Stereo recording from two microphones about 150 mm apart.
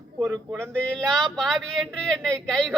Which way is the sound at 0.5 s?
5° left (ahead or behind).